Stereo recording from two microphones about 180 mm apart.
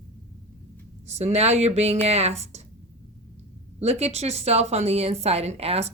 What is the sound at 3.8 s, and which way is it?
A woman's voice, 35° right (ahead or behind).